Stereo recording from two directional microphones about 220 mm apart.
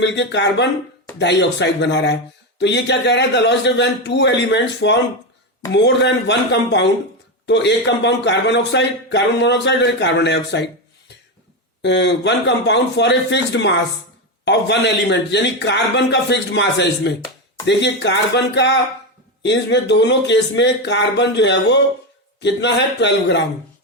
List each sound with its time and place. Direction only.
0.0 s speech: 50° left (ahead or behind)
11.8 s speech: 50° left (ahead or behind)